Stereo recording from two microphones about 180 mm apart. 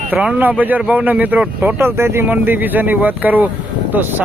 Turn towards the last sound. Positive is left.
turn(degrees=-10)  # may be behind; listen again after turning